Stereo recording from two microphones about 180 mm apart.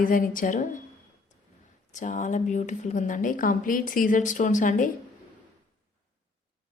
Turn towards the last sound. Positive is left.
turn(degrees=45)  # may be behind; listen again after turning